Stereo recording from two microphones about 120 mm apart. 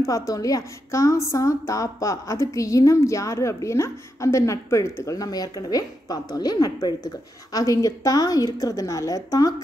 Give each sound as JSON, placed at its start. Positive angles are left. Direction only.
{"t": 0.0, "sound": "a woman's voice", "side_deg": 30}